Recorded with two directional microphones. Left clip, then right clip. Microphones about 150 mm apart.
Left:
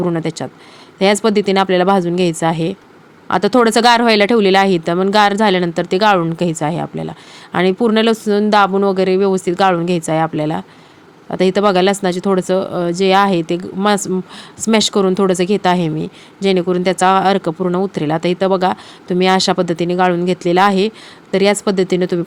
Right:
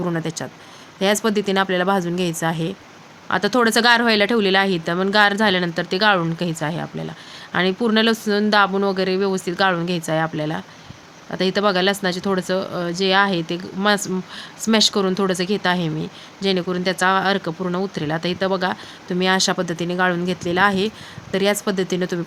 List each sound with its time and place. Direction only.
0.0 s speech: 40° left (ahead or behind)